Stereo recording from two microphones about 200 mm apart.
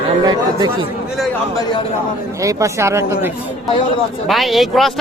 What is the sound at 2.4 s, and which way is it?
Speech, 15° right (ahead or behind).